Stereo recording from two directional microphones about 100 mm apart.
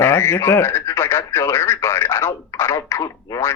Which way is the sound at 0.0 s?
25° left (ahead or behind).